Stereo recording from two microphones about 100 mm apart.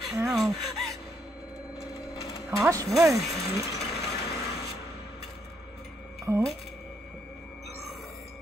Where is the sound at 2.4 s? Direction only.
30° right (ahead or behind).